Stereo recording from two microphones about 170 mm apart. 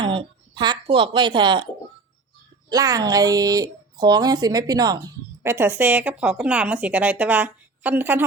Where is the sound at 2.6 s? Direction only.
20° right (ahead or behind).